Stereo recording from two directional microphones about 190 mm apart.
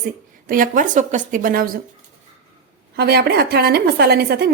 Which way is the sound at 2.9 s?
60° right (ahead or behind).